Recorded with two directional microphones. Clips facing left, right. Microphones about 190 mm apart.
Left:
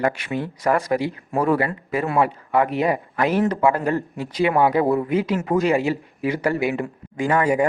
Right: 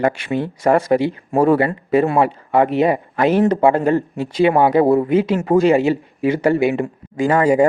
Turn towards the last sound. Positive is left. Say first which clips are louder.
# right 5 dB
turn(degrees=-30)  # may be behind; listen again after turning